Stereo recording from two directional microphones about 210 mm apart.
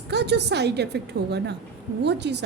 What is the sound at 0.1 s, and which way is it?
A woman's voice, 55° right (ahead or behind).